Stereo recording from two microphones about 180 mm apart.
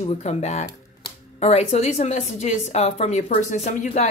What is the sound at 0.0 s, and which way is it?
A woman's voice, 40° left (ahead or behind).